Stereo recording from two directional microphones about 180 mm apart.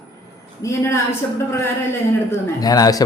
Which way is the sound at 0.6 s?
15° left (ahead or behind).